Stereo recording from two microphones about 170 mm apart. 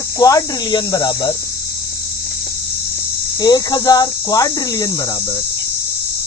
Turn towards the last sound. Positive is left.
turn(degrees=20)  # may be behind; listen again after turning